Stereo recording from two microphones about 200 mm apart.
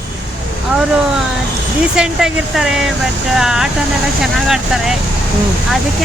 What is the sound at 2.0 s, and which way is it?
Speech, 5° right (ahead or behind).